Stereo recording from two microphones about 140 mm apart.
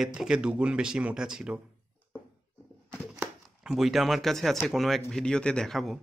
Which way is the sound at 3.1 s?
5° right (ahead or behind).